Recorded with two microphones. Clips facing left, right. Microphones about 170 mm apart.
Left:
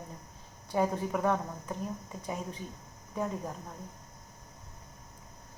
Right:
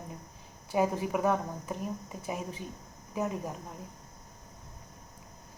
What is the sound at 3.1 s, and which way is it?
Speech, 10° right (ahead or behind).